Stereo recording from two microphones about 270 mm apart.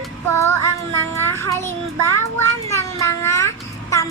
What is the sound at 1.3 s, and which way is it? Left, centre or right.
Child singing, centre.